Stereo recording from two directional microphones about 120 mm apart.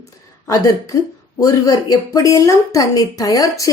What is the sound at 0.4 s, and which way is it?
A woman's voice, 30° left (ahead or behind).